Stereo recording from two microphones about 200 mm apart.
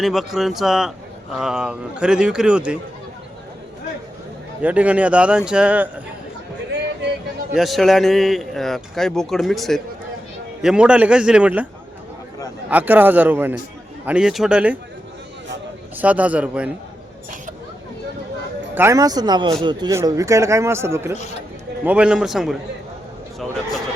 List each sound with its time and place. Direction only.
0.0 s speech: centre (ahead or behind)
4.6 s a man's voice: 5° right (ahead or behind)
7.5 s speech: centre (ahead or behind)
12.7 s a man's voice: 10° right (ahead or behind)
16.0 s a man's voice: 5° right (ahead or behind)
18.7 s a man's voice: 10° right (ahead or behind)